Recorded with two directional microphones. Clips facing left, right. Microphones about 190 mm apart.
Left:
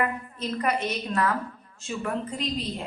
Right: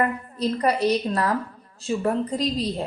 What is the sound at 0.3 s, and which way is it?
A woman's voice, 35° right (ahead or behind).